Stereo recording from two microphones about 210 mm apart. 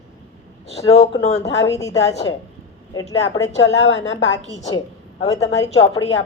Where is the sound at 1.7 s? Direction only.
15° left (ahead or behind).